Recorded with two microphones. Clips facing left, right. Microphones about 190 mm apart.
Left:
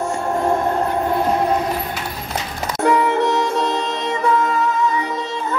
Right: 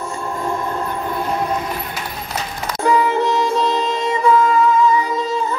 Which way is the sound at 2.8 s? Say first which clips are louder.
Even; 65° left (ahead or behind).